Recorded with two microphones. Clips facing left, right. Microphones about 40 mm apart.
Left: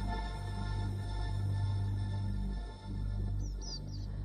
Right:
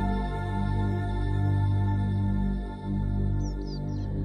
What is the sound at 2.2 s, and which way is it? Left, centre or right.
Music, right.